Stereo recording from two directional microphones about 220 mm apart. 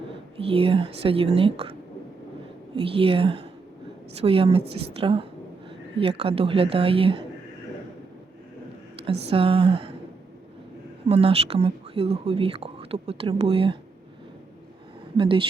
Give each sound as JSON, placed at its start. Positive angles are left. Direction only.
{"t": 0.3, "sound": "speech", "side_deg": -25}
{"t": 2.8, "sound": "speech", "side_deg": -25}
{"t": 9.3, "sound": "speech", "side_deg": -25}
{"t": 11.1, "sound": "speech", "side_deg": -25}
{"t": 15.2, "sound": "speech", "side_deg": -25}